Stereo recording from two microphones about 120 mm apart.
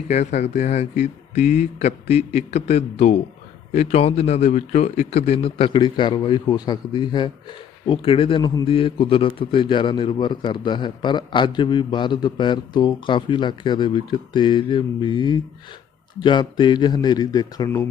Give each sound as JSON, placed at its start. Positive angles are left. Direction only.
{"t": 0.1, "sound": "a man's voice", "side_deg": 70}
{"t": 7.9, "sound": "a man's voice", "side_deg": 45}